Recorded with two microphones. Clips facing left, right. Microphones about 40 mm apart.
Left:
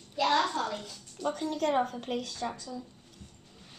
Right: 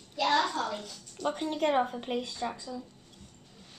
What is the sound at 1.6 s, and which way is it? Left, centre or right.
Speech, right.